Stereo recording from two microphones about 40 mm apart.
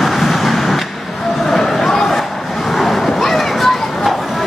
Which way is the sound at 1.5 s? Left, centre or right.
Centre.